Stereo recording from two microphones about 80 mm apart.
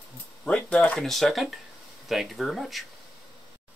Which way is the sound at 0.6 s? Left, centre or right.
Centre.